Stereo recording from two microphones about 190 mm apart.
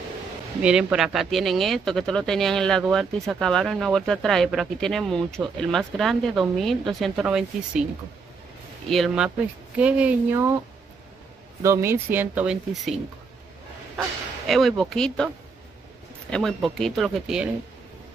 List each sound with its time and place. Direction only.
0.6 s speech: 5° right (ahead or behind)
8.8 s speech: centre (ahead or behind)
11.6 s speech: 15° right (ahead or behind)
14.5 s speech: centre (ahead or behind)
16.3 s speech: 5° left (ahead or behind)